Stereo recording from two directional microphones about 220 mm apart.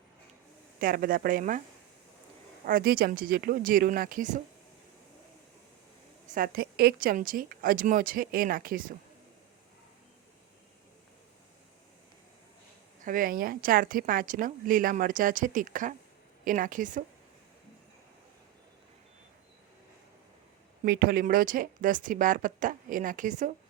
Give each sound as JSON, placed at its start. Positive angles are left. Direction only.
{"t": 0.8, "sound": "speech", "side_deg": -40}
{"t": 2.6, "sound": "speech", "side_deg": -40}
{"t": 6.2, "sound": "speech", "side_deg": -40}
{"t": 13.0, "sound": "speech", "side_deg": -40}
{"t": 20.8, "sound": "speech", "side_deg": -45}